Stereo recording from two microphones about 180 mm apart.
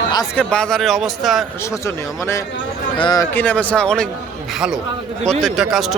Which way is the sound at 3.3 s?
10° left (ahead or behind).